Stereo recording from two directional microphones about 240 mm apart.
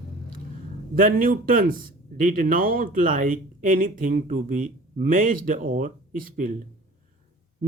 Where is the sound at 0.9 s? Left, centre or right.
Right.